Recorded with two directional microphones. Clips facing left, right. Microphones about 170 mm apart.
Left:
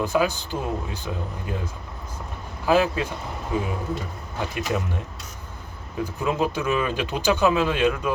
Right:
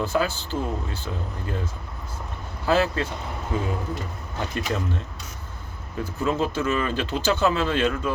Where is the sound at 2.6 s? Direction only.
15° left (ahead or behind).